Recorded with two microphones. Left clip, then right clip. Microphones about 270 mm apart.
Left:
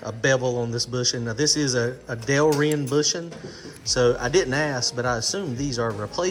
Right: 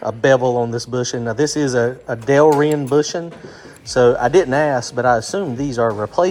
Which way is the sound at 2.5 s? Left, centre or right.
Right.